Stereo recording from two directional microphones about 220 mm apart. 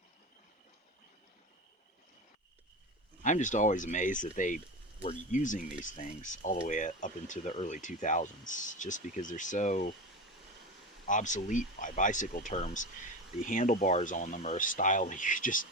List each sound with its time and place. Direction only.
3.2 s speech: 35° left (ahead or behind)
11.1 s speech: 35° left (ahead or behind)